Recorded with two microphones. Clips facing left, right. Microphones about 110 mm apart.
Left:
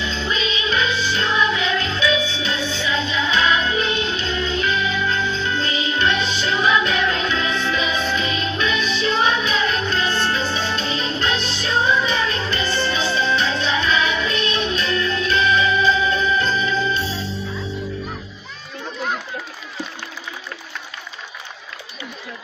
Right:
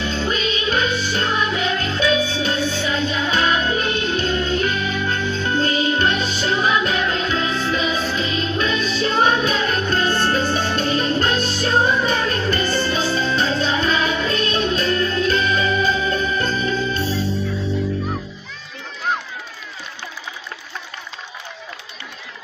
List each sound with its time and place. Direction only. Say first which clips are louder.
0.0 s music: right 2 dB; 45° right (ahead or behind)